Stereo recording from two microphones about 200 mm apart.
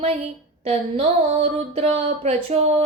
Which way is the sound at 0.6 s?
30° right (ahead or behind).